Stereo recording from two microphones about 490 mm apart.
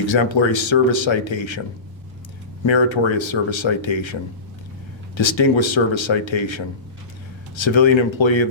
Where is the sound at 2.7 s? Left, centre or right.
Left.